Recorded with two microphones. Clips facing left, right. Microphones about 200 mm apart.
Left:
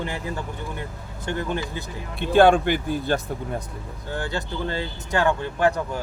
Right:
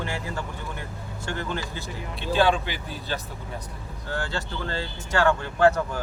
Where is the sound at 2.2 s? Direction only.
55° left (ahead or behind).